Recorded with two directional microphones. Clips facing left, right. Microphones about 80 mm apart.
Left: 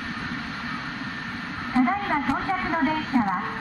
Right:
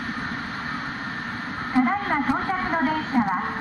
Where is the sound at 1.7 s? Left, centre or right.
Right.